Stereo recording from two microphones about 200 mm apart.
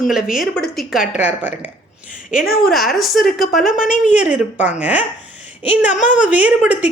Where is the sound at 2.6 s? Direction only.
Centre (ahead or behind).